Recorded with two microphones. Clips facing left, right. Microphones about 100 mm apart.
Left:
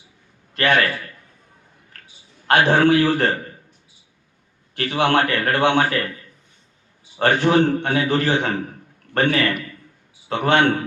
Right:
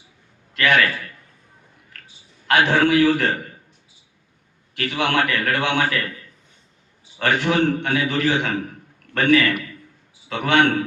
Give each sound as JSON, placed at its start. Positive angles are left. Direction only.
{"t": 0.5, "sound": "a man's voice", "side_deg": 35}
{"t": 2.5, "sound": "a man's voice", "side_deg": 35}
{"t": 4.7, "sound": "a man's voice", "side_deg": 35}
{"t": 7.2, "sound": "a man's voice", "side_deg": 35}